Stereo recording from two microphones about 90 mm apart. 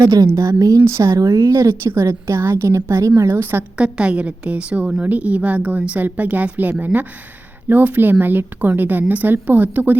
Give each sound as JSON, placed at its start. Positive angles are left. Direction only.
{"t": 0.3, "sound": "a woman's voice", "side_deg": -35}
{"t": 3.8, "sound": "a woman's voice", "side_deg": -10}